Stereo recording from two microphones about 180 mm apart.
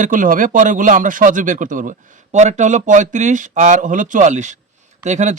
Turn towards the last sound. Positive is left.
turn(degrees=-40)  # may be behind; listen again after turning